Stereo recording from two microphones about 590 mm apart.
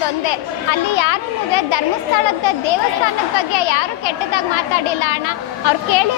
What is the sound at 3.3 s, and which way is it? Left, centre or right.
A woman's voice, left.